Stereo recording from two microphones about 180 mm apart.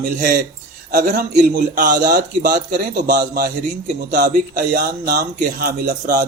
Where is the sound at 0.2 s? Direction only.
55° right (ahead or behind).